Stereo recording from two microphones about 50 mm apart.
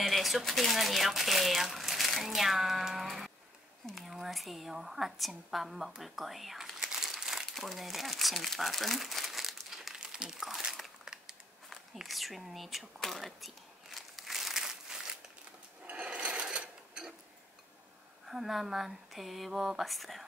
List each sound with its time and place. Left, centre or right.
0.0 s a woman's voice: centre
7.1 s crumpling: centre
7.5 s speech: centre
11.1 s crushing: centre
11.7 s a woman's voice: centre
13.9 s crumpling: centre
15.9 s a sound: right
18.2 s a woman's voice: centre